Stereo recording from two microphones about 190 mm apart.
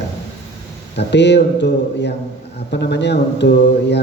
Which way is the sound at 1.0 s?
65° left (ahead or behind).